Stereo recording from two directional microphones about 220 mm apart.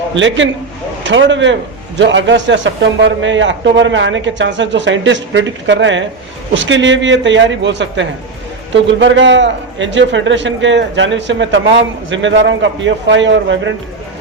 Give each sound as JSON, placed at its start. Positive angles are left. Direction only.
{"t": 0.1, "sound": "a man's voice", "side_deg": -60}